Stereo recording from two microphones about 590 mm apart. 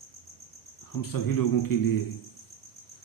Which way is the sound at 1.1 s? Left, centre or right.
Left.